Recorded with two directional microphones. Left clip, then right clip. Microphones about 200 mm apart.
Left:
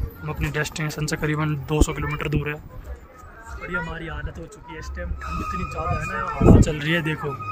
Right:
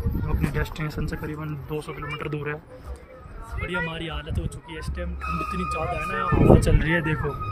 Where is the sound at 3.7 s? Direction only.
5° right (ahead or behind).